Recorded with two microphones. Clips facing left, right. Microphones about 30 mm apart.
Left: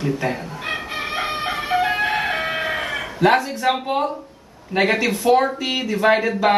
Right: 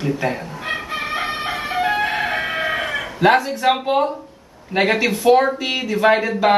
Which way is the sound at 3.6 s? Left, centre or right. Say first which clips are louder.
Right 3 dB; right.